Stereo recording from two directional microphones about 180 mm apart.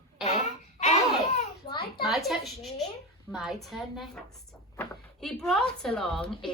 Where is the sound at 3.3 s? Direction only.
Centre (ahead or behind).